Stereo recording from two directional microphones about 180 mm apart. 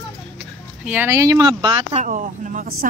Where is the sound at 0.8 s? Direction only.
10° right (ahead or behind).